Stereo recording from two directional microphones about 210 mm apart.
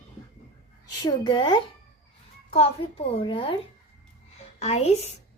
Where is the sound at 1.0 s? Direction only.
20° left (ahead or behind).